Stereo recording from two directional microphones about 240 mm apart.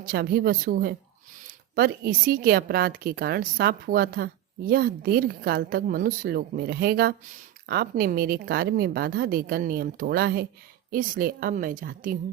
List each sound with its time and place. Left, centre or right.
0.0 s a woman's voice: right